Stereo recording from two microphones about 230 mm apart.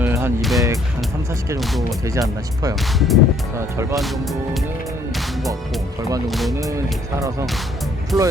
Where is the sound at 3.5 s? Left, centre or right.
Centre.